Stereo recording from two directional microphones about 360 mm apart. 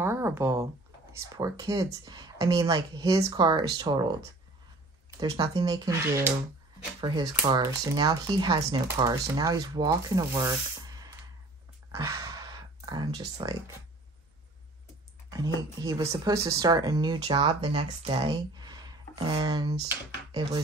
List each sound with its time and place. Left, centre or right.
0.0 s a sound: centre
1.2 s speech: centre
5.2 s speech: centre
15.3 s speech: centre